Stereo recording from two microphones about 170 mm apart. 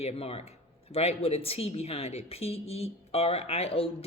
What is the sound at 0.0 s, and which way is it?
Speech, 35° left (ahead or behind).